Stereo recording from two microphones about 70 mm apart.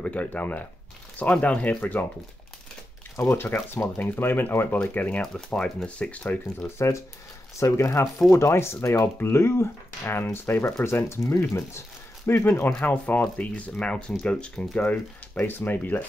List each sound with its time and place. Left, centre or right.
0.0 s speech: centre
3.2 s speech: left
6.8 s speech: left; by 15.0 s centre
15.3 s speech: left